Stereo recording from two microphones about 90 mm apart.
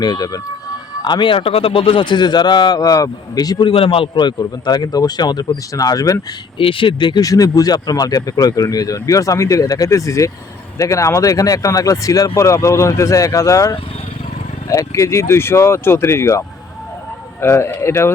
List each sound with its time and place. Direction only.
0.0 s a man's voice: 45° left (ahead or behind)
1.0 s a man's voice: 60° left (ahead or behind)
3.6 s a man's voice: 75° left (ahead or behind); by 6.1 s 40° left (ahead or behind)
6.6 s speech: 75° left (ahead or behind)
7.2 s speech: 40° left (ahead or behind)
17.4 s speech: 30° left (ahead or behind)